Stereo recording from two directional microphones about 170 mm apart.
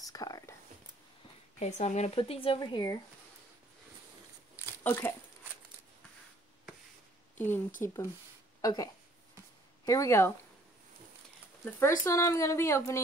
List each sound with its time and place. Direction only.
0.0 s whispering: 20° left (ahead or behind)
1.6 s speech: 45° left (ahead or behind); by 3.0 s 25° left (ahead or behind)
4.8 s speech: 10° left (ahead or behind)
7.3 s a woman's voice: 10° left (ahead or behind)
12.0 s a woman's voice: 15° left (ahead or behind)